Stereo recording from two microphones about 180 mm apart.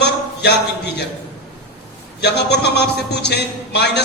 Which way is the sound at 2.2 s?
70° left (ahead or behind).